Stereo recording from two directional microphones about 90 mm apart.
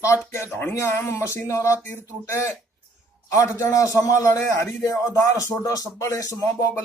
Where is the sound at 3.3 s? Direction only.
35° left (ahead or behind).